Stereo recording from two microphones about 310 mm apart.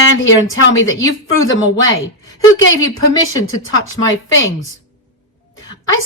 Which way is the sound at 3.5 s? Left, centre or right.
Left.